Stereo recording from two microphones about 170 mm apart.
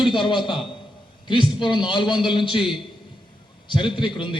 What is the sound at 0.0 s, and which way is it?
A man's voice, 30° left (ahead or behind).